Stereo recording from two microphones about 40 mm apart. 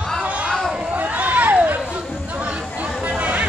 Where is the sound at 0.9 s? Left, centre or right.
Right.